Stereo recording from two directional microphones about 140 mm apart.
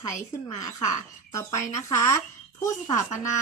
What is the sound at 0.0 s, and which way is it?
Speech, 25° left (ahead or behind).